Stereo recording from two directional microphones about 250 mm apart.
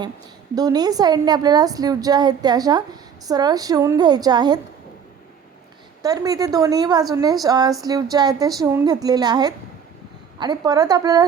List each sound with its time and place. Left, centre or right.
0.5 s a woman's voice: centre
6.0 s a woman's voice: centre